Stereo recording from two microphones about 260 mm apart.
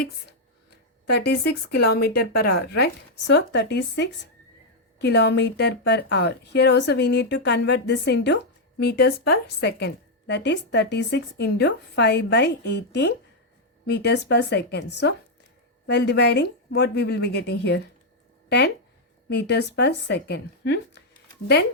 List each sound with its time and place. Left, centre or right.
1.0 s a woman's voice: left